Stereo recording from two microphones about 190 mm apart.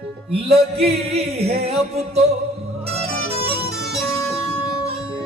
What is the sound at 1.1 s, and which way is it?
Music, 35° right (ahead or behind).